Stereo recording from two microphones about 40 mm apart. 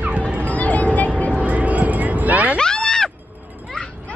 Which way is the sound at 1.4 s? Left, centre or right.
Right.